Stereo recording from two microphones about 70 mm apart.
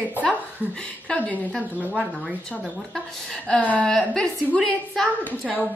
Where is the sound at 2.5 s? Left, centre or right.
Centre.